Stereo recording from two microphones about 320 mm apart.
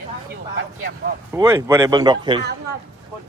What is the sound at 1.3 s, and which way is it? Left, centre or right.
Speech, centre.